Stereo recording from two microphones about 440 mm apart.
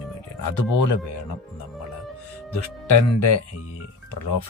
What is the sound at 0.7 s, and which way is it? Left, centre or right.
Speech, left.